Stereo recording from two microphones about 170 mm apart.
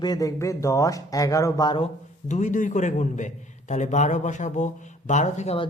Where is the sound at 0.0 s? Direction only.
20° left (ahead or behind).